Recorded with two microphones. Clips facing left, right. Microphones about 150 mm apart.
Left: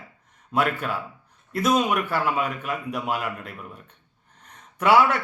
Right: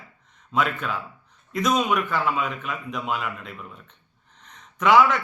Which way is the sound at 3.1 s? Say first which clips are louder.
Left 1 dB; 55° left (ahead or behind).